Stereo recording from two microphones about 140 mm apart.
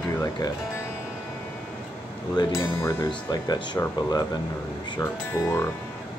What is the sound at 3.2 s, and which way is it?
Speech, 30° left (ahead or behind).